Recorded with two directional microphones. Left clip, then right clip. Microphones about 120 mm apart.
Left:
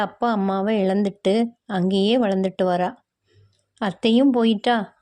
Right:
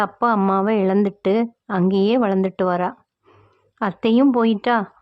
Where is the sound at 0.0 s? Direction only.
15° left (ahead or behind).